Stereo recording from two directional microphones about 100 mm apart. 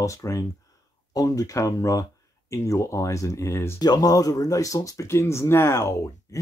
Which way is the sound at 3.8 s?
40° left (ahead or behind).